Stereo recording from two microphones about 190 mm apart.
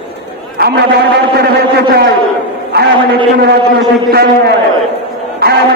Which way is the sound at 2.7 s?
60° right (ahead or behind).